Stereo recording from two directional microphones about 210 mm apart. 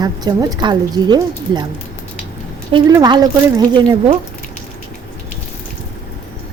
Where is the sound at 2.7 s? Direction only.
20° right (ahead or behind).